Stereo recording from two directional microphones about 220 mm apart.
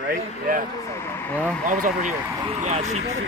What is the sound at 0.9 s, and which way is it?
Speech, 10° left (ahead or behind).